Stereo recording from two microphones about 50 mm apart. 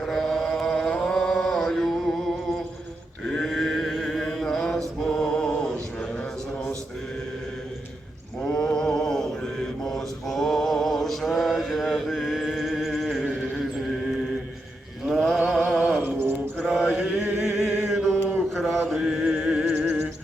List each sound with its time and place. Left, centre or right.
0.0 s chant: centre
0.9 s music: centre
3.2 s chant: centre
4.4 s mantra: centre
4.9 s a sound: centre
8.4 s mantra: centre
15.1 s a sound: centre
16.6 s mantra: centre
19.3 s music: centre
19.8 s music: centre